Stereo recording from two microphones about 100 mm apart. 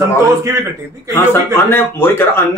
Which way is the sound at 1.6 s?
20° left (ahead or behind).